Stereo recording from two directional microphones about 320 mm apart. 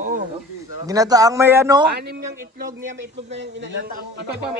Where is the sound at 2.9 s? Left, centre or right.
Right.